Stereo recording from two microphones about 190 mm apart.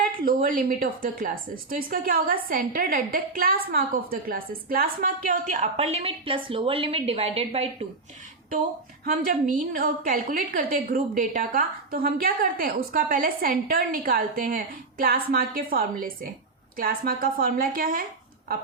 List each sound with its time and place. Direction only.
0.2 s a woman's voice: 50° right (ahead or behind); by 7.9 s 30° right (ahead or behind)
9.0 s a woman's voice: 45° right (ahead or behind)